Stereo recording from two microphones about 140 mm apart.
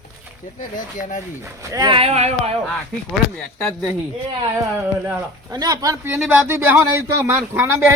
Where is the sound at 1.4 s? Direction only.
20° right (ahead or behind).